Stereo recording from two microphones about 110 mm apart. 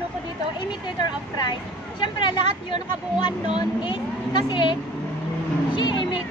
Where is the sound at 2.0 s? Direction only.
45° left (ahead or behind).